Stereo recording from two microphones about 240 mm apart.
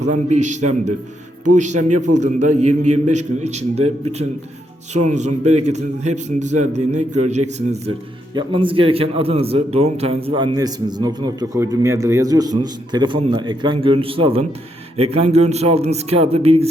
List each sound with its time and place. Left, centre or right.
0.0 s a man's voice: right